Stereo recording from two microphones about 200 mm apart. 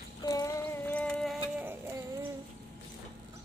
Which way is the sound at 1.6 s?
10° right (ahead or behind).